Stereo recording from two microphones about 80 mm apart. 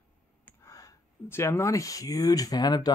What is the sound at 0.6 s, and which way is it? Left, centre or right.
Speech, left.